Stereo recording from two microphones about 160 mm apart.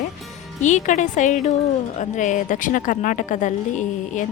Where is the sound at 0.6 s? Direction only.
50° left (ahead or behind).